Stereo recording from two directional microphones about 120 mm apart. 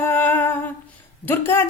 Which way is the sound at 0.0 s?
15° left (ahead or behind).